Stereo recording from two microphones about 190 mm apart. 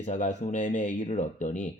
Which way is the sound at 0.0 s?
40° left (ahead or behind).